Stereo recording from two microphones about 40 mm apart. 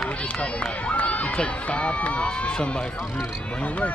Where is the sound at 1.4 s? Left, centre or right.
Left.